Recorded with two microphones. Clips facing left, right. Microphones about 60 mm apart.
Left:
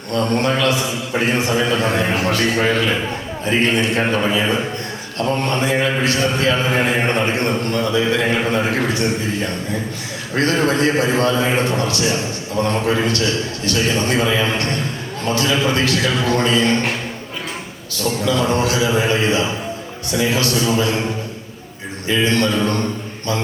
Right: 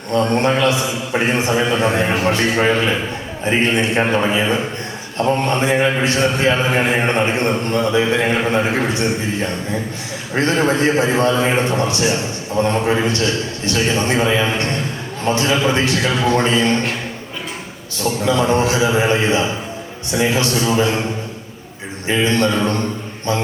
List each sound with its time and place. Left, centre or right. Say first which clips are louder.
0.1 s a man's voice: right 2 dB; right
18.0 s a man's voice: right 1 dB; right
22.0 s a man's voice: right 1 dB; right